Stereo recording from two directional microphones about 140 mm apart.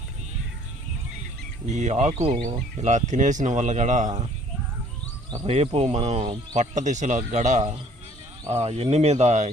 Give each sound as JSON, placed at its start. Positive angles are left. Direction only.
{"t": 1.7, "sound": "speech", "side_deg": -55}
{"t": 5.5, "sound": "speech", "side_deg": -50}
{"t": 6.6, "sound": "speech", "side_deg": -60}